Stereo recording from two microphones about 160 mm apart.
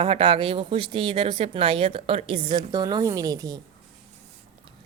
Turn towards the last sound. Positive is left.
turn(degrees=-25)  # may be behind; listen again after turning